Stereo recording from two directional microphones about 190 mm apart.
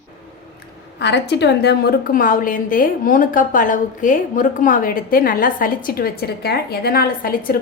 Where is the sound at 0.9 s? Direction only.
65° left (ahead or behind).